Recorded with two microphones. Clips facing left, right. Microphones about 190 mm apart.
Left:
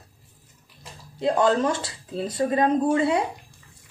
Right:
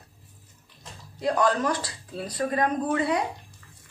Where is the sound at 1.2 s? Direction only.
25° left (ahead or behind).